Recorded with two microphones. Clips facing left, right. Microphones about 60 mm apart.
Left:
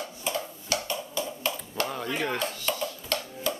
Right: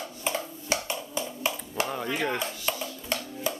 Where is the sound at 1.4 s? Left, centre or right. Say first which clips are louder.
Right 1 dB; centre.